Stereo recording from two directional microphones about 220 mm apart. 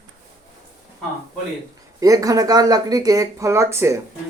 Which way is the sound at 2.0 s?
15° right (ahead or behind).